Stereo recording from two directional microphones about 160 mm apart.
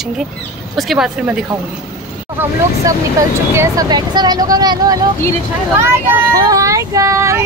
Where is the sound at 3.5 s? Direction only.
20° right (ahead or behind).